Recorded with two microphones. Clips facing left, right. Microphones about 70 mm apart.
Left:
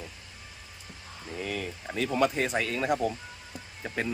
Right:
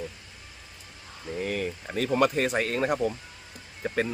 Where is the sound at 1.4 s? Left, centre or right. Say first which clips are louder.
Right 4 dB; right.